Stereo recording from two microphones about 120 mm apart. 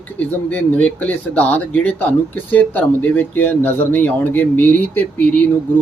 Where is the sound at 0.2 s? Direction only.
15° left (ahead or behind).